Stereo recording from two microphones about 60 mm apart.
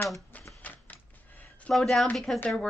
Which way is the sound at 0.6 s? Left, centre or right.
Left.